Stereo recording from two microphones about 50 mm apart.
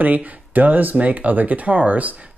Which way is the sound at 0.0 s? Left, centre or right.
Right.